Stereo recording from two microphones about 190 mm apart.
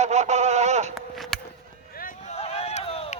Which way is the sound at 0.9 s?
Centre (ahead or behind).